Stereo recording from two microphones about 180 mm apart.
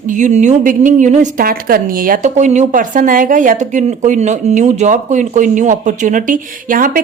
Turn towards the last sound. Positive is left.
turn(degrees=-50)  # may be behind; listen again after turning